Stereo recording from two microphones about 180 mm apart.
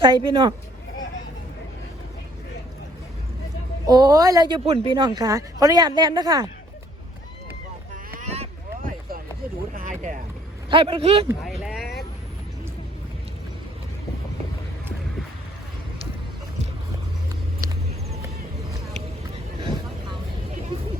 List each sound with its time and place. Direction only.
0.0 s speech: 25° right (ahead or behind)
3.8 s speech: 20° right (ahead or behind)
8.2 s boat: 35° right (ahead or behind)
8.8 s a sound: 50° right (ahead or behind)
9.7 s speech: 45° right (ahead or behind)
10.7 s speech: 30° right (ahead or behind)
11.4 s speech: centre (ahead or behind)